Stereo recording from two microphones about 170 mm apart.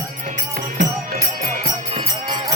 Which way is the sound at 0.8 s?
50° right (ahead or behind).